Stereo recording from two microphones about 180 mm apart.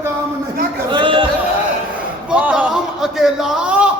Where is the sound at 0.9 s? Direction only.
25° right (ahead or behind).